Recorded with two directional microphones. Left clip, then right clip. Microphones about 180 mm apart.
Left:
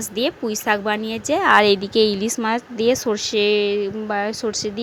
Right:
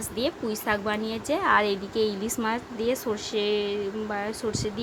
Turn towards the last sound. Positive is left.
turn(degrees=35)  # may be behind; listen again after turning